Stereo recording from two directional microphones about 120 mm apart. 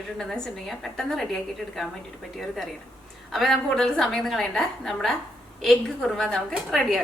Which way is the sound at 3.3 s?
Centre (ahead or behind).